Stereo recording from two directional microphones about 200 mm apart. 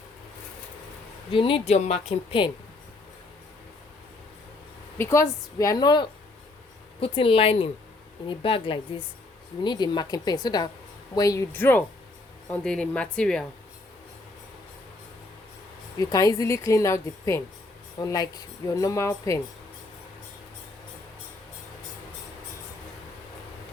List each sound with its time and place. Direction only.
1.3 s speech: 25° left (ahead or behind)
4.9 s speech: 15° left (ahead or behind)
16.0 s speech: 15° left (ahead or behind)